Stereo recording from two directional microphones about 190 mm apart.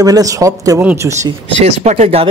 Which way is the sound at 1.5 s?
35° right (ahead or behind).